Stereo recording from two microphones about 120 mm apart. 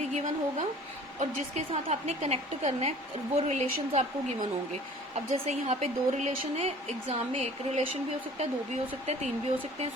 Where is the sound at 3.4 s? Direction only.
90° right.